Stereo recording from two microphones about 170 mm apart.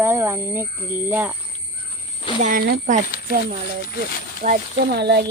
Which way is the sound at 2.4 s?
55° right (ahead or behind).